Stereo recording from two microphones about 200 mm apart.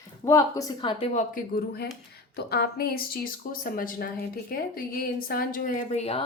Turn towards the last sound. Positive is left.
turn(degrees=30)  # may be behind; listen again after turning